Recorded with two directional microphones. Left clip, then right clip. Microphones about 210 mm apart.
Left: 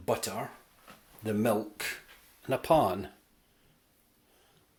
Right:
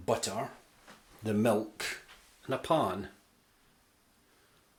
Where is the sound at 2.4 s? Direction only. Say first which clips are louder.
Left 4 dB; 20° left (ahead or behind).